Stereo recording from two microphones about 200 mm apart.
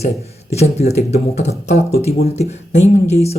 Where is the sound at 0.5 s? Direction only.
35° left (ahead or behind).